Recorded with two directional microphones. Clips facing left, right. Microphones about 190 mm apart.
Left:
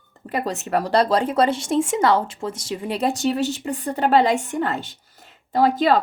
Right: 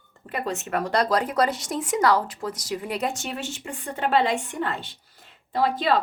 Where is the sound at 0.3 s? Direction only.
35° left (ahead or behind).